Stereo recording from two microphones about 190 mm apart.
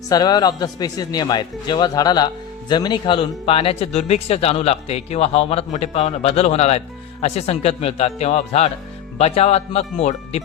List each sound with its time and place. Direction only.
0.1 s a man's voice: 20° left (ahead or behind)